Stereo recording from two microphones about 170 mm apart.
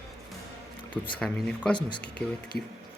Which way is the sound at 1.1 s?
5° left (ahead or behind).